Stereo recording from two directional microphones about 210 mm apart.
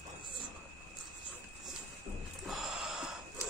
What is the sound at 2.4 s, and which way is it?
Gasp, centre (ahead or behind).